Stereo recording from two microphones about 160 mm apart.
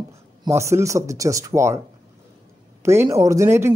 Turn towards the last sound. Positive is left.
turn(degrees=-15)  # may be behind; listen again after turning